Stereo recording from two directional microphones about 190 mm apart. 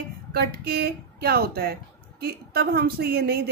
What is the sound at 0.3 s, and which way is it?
A woman's voice, 55° right (ahead or behind).